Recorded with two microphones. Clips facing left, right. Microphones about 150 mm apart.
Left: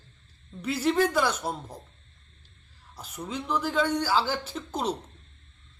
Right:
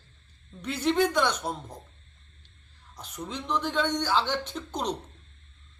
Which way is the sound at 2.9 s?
5° left (ahead or behind).